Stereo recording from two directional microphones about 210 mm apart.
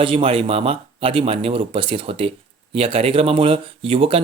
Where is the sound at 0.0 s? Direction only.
25° right (ahead or behind).